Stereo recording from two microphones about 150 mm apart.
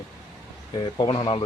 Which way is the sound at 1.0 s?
35° left (ahead or behind).